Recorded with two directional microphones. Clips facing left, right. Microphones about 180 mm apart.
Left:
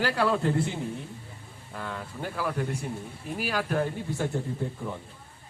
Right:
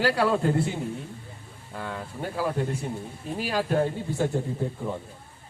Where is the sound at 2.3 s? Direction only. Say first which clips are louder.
Right 3 dB; 25° right (ahead or behind).